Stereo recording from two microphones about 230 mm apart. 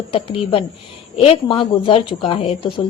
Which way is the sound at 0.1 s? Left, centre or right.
Left.